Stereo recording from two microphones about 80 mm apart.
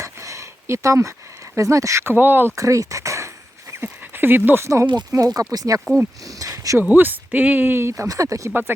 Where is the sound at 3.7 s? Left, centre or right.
Right.